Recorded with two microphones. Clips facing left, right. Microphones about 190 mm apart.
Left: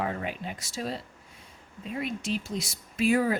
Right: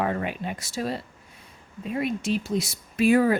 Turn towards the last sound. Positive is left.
turn(degrees=-60)  # may be behind; listen again after turning